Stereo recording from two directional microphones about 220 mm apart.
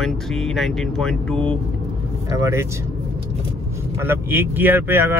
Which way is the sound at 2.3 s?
15° right (ahead or behind).